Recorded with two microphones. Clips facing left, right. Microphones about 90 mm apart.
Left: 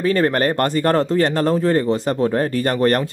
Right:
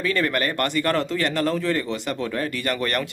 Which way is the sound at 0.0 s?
35° left (ahead or behind).